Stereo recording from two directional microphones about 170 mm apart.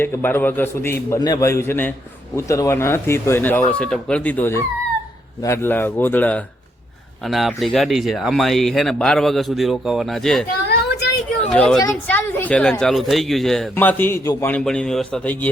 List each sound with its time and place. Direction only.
0.0 s a man's voice: 10° left (ahead or behind)
7.3 s a man's voice: centre (ahead or behind)